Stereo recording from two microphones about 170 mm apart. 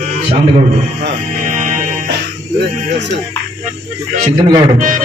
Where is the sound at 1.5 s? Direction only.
45° right (ahead or behind).